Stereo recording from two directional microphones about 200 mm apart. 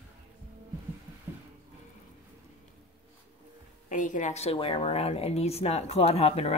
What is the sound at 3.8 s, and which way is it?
Speech, 40° left (ahead or behind).